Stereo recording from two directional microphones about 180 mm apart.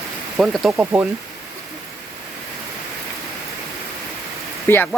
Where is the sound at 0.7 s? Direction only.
10° right (ahead or behind).